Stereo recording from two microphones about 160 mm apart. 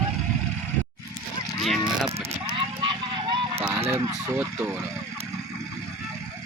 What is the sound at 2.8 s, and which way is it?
Honk, 30° right (ahead or behind).